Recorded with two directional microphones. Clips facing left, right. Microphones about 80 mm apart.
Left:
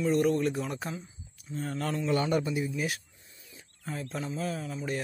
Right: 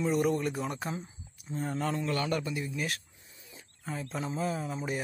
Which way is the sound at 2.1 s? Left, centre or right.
Centre.